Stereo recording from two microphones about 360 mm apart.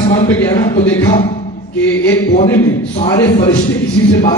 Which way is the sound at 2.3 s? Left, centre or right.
Centre.